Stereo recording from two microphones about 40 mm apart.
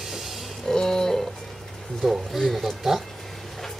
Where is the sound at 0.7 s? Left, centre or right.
Centre.